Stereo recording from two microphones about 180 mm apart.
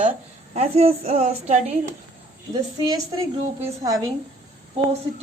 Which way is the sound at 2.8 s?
20° right (ahead or behind).